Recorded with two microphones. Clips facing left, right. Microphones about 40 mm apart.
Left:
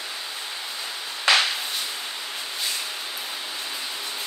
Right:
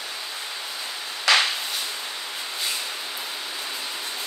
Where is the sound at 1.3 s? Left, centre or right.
Left.